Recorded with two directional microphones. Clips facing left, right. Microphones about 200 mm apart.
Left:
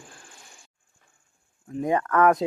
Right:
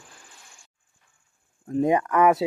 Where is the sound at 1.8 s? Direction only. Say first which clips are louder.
Even; 15° right (ahead or behind).